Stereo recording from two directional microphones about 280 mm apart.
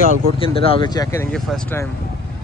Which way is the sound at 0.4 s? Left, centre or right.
Centre.